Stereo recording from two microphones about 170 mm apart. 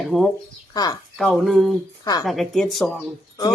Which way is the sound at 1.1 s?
Centre (ahead or behind).